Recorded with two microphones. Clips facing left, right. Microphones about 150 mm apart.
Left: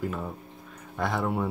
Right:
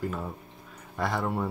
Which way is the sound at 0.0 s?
Centre (ahead or behind).